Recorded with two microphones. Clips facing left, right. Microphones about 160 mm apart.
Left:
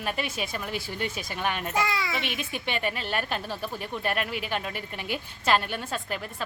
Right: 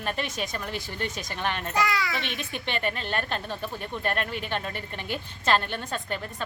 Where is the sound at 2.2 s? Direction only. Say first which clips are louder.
Left 1 dB; 5° left (ahead or behind).